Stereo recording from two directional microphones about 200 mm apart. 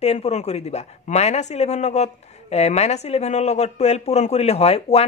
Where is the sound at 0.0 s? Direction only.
30° left (ahead or behind).